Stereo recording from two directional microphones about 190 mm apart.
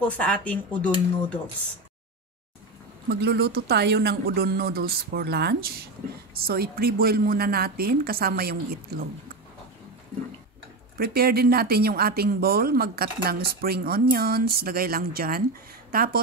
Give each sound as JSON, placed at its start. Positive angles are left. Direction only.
{"t": 0.0, "sound": "speech", "side_deg": 5}
{"t": 3.1, "sound": "speech", "side_deg": -60}
{"t": 11.0, "sound": "speech", "side_deg": -55}